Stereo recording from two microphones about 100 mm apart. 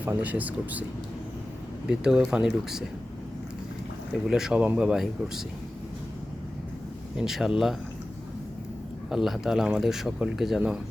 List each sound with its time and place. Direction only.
0.0 s speech: 15° right (ahead or behind)
1.9 s speech: 5° right (ahead or behind)
4.3 s speech: 5° right (ahead or behind)
7.2 s speech: 5° right (ahead or behind)
9.0 s speech: 5° right (ahead or behind)